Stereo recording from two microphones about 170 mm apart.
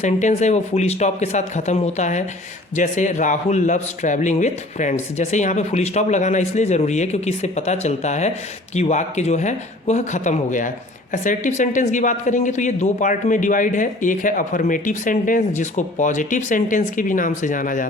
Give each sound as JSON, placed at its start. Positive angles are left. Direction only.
{"t": 0.0, "sound": "speech", "side_deg": 45}